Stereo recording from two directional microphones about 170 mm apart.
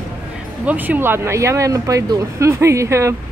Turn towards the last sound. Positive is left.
turn(degrees=-15)  # may be behind; listen again after turning